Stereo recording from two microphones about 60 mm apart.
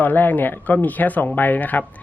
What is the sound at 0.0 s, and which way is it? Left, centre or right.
Speech, left.